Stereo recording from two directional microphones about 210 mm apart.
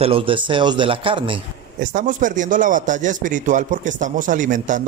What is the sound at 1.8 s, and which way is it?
A man's voice, 40° right (ahead or behind).